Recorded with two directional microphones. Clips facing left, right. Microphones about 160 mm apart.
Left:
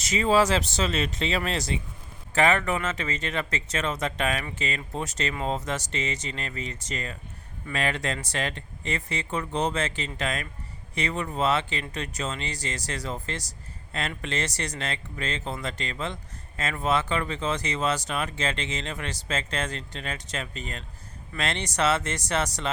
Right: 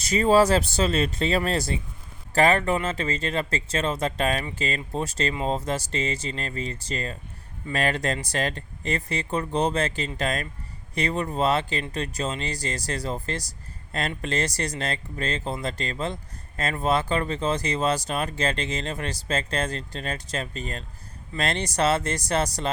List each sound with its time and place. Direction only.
0.1 s speech: 40° right (ahead or behind)